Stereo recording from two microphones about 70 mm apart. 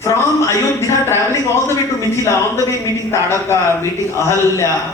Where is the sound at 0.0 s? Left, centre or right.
Left.